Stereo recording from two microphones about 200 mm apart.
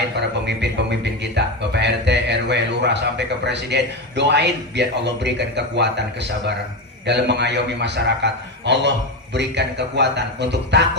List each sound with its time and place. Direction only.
0.4 s a man's voice: 60° right (ahead or behind)